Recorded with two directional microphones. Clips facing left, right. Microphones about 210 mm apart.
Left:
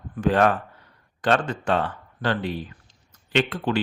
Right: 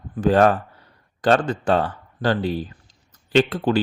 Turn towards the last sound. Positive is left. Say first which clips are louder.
# right 5 dB
turn(degrees=-35)  # may be behind; listen again after turning